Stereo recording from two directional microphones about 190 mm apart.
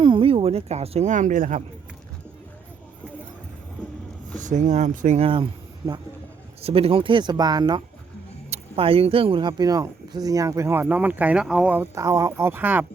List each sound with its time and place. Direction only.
0.0 s speech: 25° right (ahead or behind)
4.4 s speech: 40° right (ahead or behind); by 7.8 s 20° right (ahead or behind)
8.4 s speech: 35° right (ahead or behind); by 12.8 s 10° right (ahead or behind)